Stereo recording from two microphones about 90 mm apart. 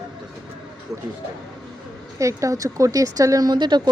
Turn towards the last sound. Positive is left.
turn(degrees=-55)  # may be behind; listen again after turning